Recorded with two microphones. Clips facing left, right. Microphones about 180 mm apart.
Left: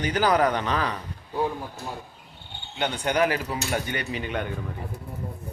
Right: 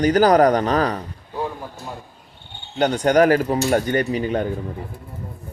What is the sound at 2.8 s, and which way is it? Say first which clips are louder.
Speech: right 8 dB; 40° right (ahead or behind).